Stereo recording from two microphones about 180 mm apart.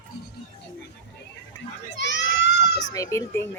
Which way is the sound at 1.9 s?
80° left.